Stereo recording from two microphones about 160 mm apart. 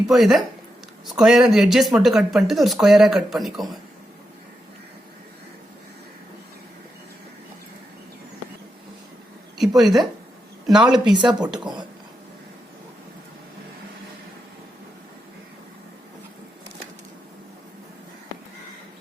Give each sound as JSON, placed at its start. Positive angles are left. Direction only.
{"t": 0.1, "sound": "speech", "side_deg": 0}
{"t": 9.6, "sound": "speech", "side_deg": 0}
{"t": 11.0, "sound": "speech", "side_deg": -30}